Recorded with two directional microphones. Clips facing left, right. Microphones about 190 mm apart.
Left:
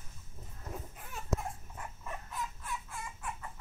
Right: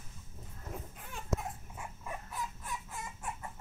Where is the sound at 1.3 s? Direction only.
10° right (ahead or behind).